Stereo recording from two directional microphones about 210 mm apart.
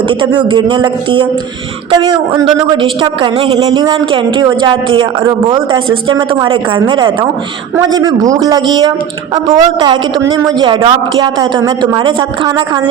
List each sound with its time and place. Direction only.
0.1 s a woman's voice: 25° right (ahead or behind)